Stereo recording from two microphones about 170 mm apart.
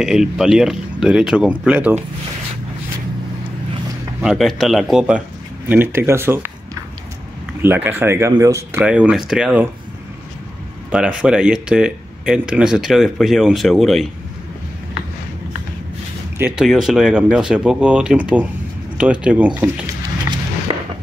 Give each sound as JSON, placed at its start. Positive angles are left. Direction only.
{"t": 0.0, "sound": "speech", "side_deg": -5}
{"t": 4.2, "sound": "speech", "side_deg": 0}
{"t": 8.8, "sound": "speech", "side_deg": -5}
{"t": 10.9, "sound": "speech", "side_deg": -5}
{"t": 16.3, "sound": "speech", "side_deg": -5}